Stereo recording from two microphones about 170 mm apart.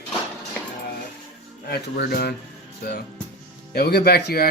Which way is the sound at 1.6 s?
70° left (ahead or behind).